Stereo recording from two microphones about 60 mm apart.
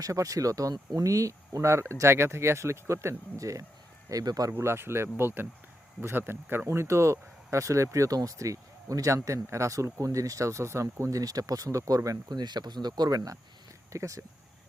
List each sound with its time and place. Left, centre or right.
0.0 s speech: right
4.1 s speech: right
4.5 s speech: right
6.7 s speech: right
11.2 s speech: right
12.6 s speech: right
13.1 s speech: right
13.9 s speech: right